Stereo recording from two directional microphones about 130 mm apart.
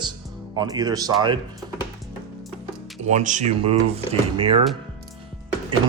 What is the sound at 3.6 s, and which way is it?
Speech, 50° right (ahead or behind).